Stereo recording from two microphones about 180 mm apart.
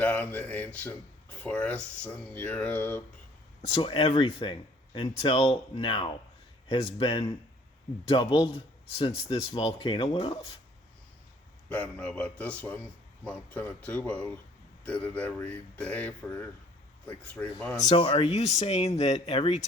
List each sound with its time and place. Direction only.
0.0 s speech: 10° left (ahead or behind)
3.8 s speech: 30° left (ahead or behind)
11.7 s speech: 5° left (ahead or behind)
17.7 s speech: 35° left (ahead or behind)